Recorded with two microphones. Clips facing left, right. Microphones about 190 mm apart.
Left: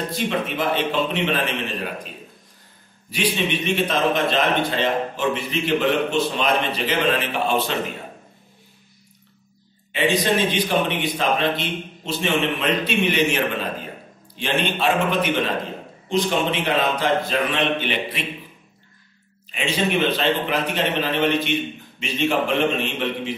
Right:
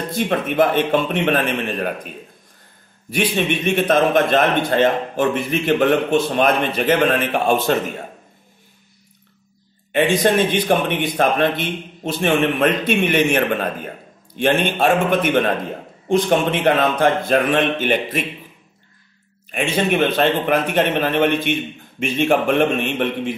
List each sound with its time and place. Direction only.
0.1 s a man's voice: 55° right (ahead or behind)
3.1 s a man's voice: 50° right (ahead or behind)
9.9 s a man's voice: 55° right (ahead or behind)
19.5 s a man's voice: 55° right (ahead or behind)